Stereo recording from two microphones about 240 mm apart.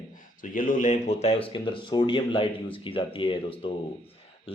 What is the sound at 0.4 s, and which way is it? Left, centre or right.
A man's voice, left.